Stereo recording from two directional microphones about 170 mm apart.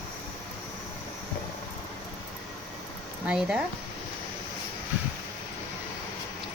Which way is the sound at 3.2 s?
5° right (ahead or behind).